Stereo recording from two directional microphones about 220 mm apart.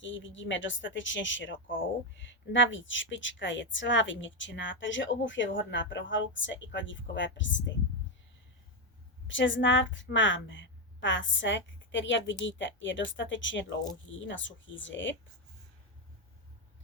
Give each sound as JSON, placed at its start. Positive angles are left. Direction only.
{"t": 0.0, "sound": "a woman's voice", "side_deg": 55}
{"t": 9.2, "sound": "a woman's voice", "side_deg": 55}